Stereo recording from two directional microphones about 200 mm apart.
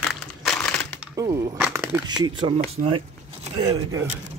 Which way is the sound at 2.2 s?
25° right (ahead or behind).